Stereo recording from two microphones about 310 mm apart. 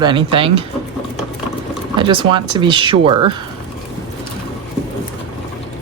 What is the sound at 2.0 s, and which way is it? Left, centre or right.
Speech, centre.